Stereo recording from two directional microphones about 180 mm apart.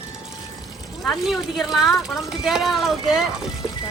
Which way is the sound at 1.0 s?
Centre (ahead or behind).